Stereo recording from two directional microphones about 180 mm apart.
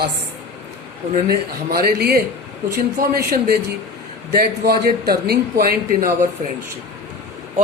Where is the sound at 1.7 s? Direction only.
55° right (ahead or behind).